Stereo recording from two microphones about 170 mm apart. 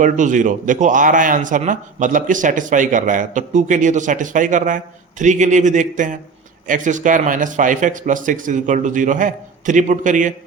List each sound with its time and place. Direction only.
0.0 s speech: 50° right (ahead or behind)